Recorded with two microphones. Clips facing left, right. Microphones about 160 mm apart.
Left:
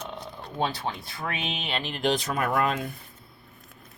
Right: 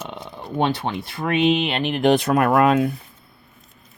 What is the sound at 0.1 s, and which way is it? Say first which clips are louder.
Speech: right 7 dB; 70° right (ahead or behind).